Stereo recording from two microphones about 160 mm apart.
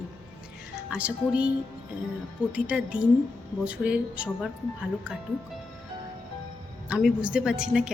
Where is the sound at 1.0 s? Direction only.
5° right (ahead or behind).